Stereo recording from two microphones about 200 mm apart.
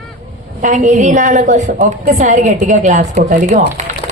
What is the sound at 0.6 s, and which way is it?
A woman's voice, 40° right (ahead or behind).